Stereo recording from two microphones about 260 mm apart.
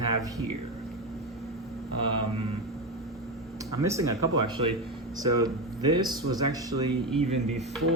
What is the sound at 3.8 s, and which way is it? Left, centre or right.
Speech, centre.